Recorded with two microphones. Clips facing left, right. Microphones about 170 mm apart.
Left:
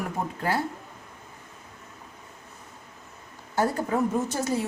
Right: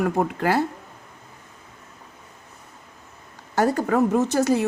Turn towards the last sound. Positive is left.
turn(degrees=-75)  # may be behind; listen again after turning